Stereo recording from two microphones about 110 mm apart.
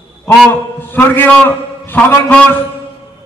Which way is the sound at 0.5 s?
20° left (ahead or behind).